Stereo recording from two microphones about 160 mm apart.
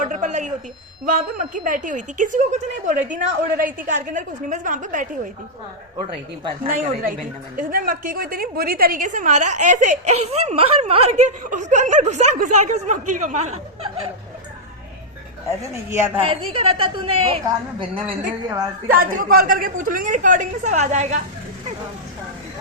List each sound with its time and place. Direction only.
0.0 s a sound: 50° right (ahead or behind)
1.0 s a woman's voice: 60° right (ahead or behind)
6.7 s a woman's voice: 55° right (ahead or behind)
15.6 s speech: 15° right (ahead or behind)
16.2 s a woman's voice: 35° right (ahead or behind)
18.4 s a woman's voice: 25° right (ahead or behind)
18.9 s a woman's voice: 60° right (ahead or behind)